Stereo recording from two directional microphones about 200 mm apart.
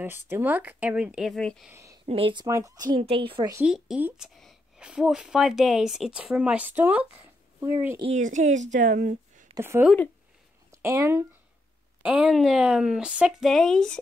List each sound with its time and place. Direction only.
0.0 s speech: 10° right (ahead or behind)
1.7 s speech: 15° right (ahead or behind)
2.0 s speech: 25° right (ahead or behind)
2.4 s speech: 15° right (ahead or behind)
3.5 s a woman's voice: 5° right (ahead or behind)
8.0 s speech: 35° right (ahead or behind)
8.7 s a sound: 40° right (ahead or behind)
9.6 s speech: 10° right (ahead or behind)
12.0 s a woman's voice: 5° right (ahead or behind)